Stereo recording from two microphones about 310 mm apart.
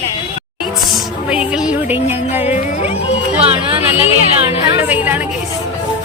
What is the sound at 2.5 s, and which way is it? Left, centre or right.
Music, left.